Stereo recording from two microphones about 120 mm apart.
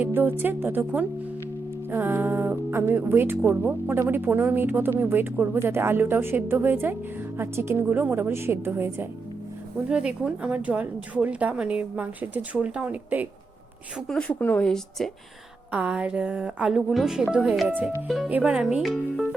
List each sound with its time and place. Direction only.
0.0 s a woman's voice: 15° right (ahead or behind)
9.9 s speech: 10° right (ahead or behind)
14.1 s speech: 10° left (ahead or behind)
15.7 s speech: 10° right (ahead or behind)